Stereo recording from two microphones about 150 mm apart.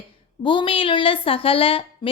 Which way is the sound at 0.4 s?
35° left (ahead or behind).